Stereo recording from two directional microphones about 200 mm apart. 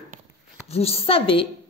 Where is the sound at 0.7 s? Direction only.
30° left (ahead or behind).